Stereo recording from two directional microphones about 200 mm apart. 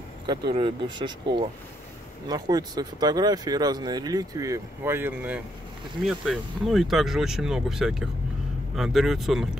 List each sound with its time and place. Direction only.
0.5 s speech: 25° right (ahead or behind); by 9.5 s centre (ahead or behind)